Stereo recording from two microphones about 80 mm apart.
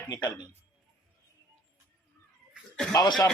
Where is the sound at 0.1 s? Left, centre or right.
Left.